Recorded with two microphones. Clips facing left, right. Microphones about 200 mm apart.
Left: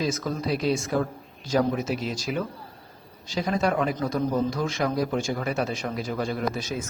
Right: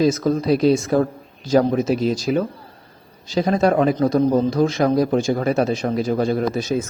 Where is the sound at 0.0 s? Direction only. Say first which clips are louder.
Right 10 dB; 40° right (ahead or behind).